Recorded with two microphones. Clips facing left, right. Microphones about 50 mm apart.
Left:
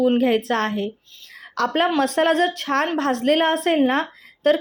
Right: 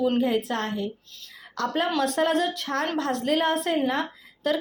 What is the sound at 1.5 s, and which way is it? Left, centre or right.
A woman's voice, left.